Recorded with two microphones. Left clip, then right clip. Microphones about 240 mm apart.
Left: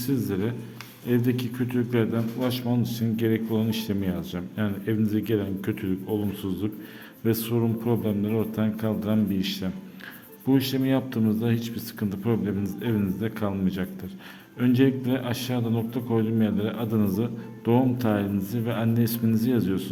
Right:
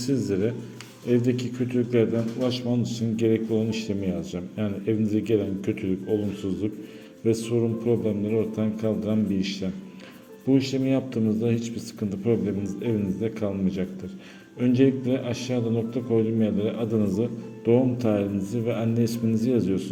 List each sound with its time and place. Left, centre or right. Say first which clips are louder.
0.0 s a man's voice: right 3 dB; centre